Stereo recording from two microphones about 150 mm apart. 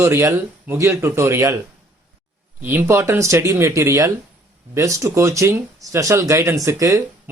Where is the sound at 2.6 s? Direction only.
15° right (ahead or behind).